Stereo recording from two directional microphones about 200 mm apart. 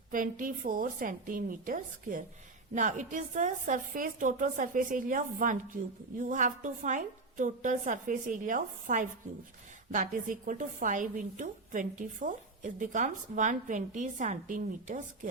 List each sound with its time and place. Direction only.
0.1 s a woman's voice: 40° right (ahead or behind)